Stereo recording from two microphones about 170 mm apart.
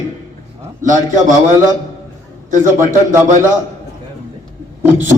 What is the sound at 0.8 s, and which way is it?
Speech, 50° right (ahead or behind).